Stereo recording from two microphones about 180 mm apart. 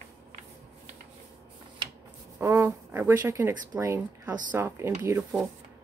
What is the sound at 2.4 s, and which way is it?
Speech, 15° right (ahead or behind).